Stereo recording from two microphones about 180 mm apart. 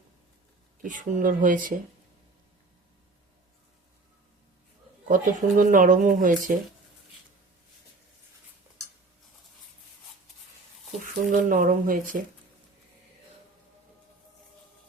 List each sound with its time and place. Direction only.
0.8 s speech: 45° right (ahead or behind)
5.0 s speech: 45° right (ahead or behind)
11.0 s speech: 50° right (ahead or behind)